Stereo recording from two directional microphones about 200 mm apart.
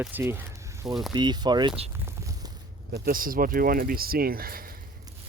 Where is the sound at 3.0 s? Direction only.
45° right (ahead or behind).